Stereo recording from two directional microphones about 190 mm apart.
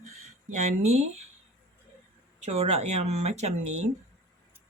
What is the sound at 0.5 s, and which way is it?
Speech, 35° right (ahead or behind).